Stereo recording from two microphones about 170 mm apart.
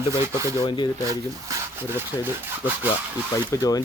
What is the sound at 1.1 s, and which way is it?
Speech, 15° right (ahead or behind).